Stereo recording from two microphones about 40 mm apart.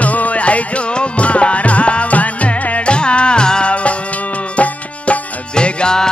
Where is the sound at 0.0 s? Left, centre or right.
Left.